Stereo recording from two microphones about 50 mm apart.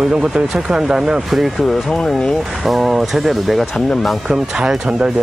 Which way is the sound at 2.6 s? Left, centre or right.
Centre.